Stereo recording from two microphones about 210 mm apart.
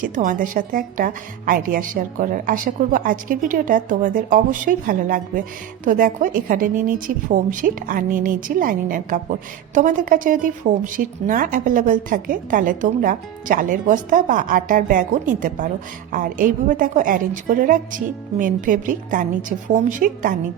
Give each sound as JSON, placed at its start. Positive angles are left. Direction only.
{"t": 0.0, "sound": "a woman's voice", "side_deg": -40}